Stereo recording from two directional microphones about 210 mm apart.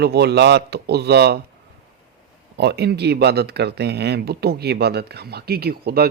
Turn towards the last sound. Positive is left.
turn(degrees=-50)  # may be behind; listen again after turning